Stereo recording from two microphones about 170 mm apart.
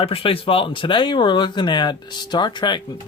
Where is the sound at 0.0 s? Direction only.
35° left (ahead or behind).